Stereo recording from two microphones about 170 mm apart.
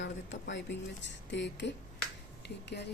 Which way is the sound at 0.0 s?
90° left.